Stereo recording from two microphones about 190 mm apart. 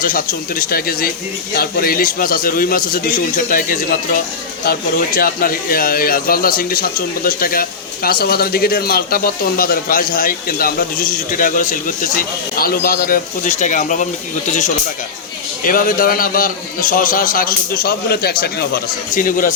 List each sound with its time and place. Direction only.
0.0 s speech: 45° left (ahead or behind)